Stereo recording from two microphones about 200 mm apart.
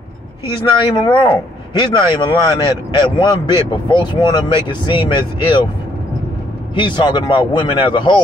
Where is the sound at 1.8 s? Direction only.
25° left (ahead or behind).